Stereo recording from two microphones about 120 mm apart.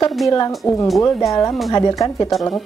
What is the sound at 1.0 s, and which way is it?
A woman's voice, 25° left (ahead or behind).